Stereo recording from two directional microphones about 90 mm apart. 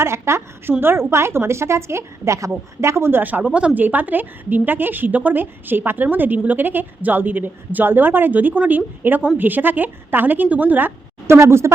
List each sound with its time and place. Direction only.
0.0 s a woman's voice: 30° right (ahead or behind)